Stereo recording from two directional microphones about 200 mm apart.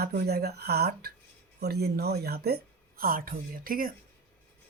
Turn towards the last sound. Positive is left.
turn(degrees=-45)  # may be behind; listen again after turning